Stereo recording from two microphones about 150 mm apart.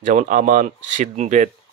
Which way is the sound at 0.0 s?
55° right (ahead or behind).